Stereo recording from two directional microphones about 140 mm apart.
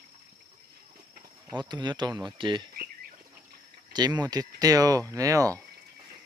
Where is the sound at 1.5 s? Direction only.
30° right (ahead or behind).